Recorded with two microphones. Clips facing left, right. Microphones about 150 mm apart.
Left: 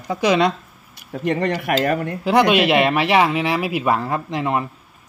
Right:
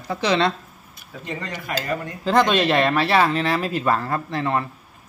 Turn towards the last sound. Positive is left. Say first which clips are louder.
# left 2 dB
turn(degrees=15)  # may be behind; listen again after turning